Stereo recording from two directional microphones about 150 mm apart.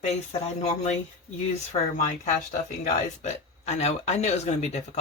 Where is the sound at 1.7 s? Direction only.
50° left (ahead or behind).